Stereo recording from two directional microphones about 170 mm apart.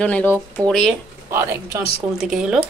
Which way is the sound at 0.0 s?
10° left (ahead or behind).